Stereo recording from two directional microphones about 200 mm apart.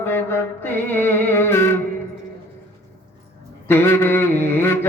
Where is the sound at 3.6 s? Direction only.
10° left (ahead or behind).